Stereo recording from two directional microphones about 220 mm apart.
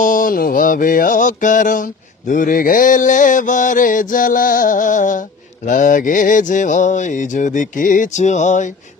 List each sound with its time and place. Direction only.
0.0 s mantra: 40° left (ahead or behind)